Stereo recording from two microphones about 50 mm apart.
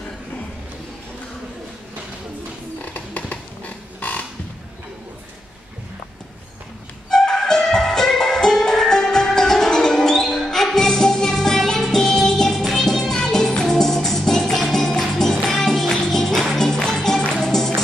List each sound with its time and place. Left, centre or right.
2.8 s music: left
7.1 s music: centre